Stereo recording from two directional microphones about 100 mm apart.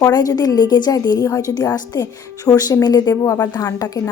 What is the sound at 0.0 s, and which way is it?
A woman's voice, 40° left (ahead or behind).